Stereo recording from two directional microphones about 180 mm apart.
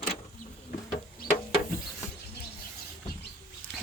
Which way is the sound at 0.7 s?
45° left (ahead or behind).